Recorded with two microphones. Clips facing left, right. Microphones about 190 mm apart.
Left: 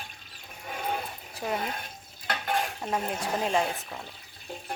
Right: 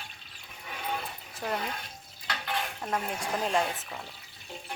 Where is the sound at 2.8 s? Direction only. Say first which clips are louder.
Left 2 dB; 10° left (ahead or behind).